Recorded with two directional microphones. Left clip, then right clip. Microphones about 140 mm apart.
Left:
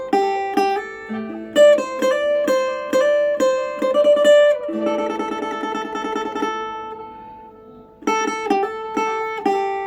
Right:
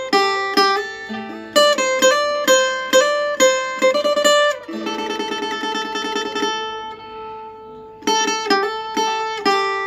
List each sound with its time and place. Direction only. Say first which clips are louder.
0.0 s music: right 2 dB; 40° right (ahead or behind)
8.0 s music: right 2 dB; 40° right (ahead or behind)